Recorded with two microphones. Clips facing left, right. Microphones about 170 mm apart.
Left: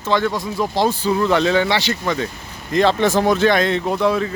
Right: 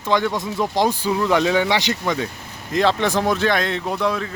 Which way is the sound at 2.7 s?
Centre (ahead or behind).